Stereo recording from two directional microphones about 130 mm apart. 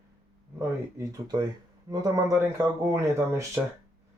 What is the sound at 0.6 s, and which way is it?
Speech, 25° right (ahead or behind).